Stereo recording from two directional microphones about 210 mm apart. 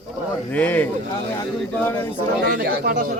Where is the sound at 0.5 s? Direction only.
5° left (ahead or behind).